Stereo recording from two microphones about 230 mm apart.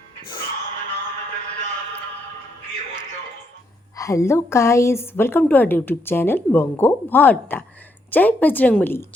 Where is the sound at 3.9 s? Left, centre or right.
Centre.